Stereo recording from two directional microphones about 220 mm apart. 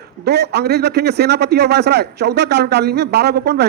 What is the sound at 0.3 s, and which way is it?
A man's voice, 50° right (ahead or behind).